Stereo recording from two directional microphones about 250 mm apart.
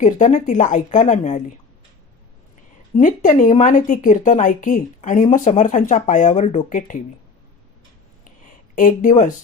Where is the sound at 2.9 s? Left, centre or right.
Left.